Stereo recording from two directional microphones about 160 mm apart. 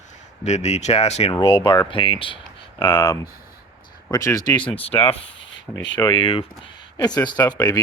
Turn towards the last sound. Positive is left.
turn(degrees=25)  # may be behind; listen again after turning